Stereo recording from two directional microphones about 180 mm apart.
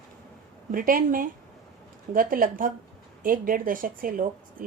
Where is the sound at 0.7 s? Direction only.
50° right (ahead or behind).